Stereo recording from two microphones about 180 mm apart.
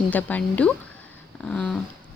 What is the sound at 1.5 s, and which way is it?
Dog, 5° left (ahead or behind).